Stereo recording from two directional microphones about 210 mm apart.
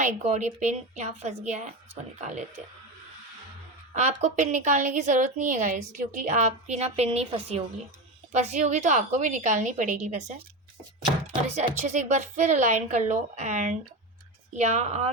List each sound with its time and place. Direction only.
0.0 s a woman's voice: 35° right (ahead or behind)
3.9 s a woman's voice: 35° right (ahead or behind)
11.5 s a woman's voice: 35° right (ahead or behind)